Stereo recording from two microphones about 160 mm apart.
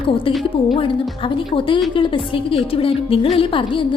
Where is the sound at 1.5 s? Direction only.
30° left (ahead or behind).